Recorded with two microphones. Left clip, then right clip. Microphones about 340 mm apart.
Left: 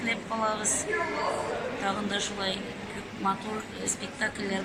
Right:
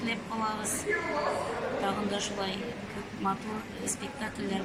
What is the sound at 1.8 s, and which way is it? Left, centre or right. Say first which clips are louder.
Speech: left 3 dB; centre.